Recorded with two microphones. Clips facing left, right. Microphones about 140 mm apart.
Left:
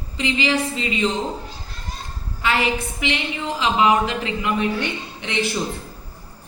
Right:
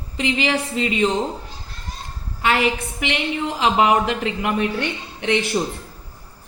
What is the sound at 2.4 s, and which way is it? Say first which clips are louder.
A woman's voice: right 2 dB; 55° right (ahead or behind).